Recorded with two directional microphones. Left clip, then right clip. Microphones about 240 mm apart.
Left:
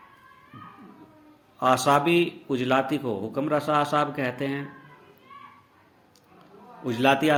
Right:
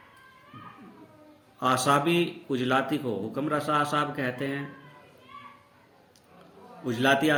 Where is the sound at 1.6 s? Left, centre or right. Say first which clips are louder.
Left 3 dB; centre.